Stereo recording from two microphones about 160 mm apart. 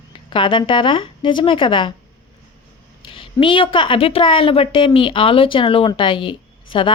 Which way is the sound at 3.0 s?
35° left (ahead or behind).